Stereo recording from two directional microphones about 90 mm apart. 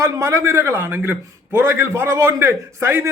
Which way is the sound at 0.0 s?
30° right (ahead or behind).